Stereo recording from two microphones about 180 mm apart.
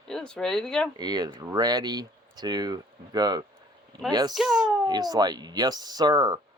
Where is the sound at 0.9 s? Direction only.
20° right (ahead or behind).